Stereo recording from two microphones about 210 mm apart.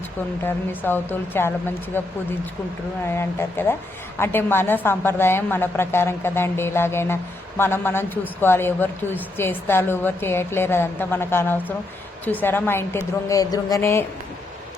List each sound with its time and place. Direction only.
0.4 s a woman's voice: 10° left (ahead or behind)
3.1 s a woman's voice: 10° left (ahead or behind)